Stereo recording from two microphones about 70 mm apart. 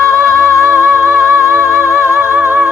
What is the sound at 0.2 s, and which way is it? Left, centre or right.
Music, right.